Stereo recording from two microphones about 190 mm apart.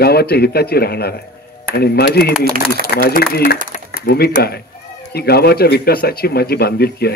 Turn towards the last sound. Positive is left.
turn(degrees=55)  # may be behind; listen again after turning